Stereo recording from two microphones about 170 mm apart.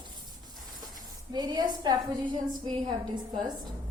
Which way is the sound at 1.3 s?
25° right (ahead or behind).